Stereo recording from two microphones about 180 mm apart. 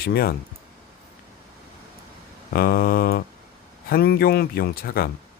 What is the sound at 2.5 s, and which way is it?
Speech, 55° left (ahead or behind).